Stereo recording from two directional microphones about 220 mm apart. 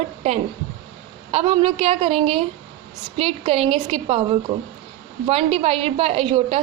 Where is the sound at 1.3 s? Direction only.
25° right (ahead or behind).